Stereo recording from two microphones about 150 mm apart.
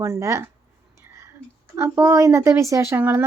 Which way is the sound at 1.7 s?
15° right (ahead or behind).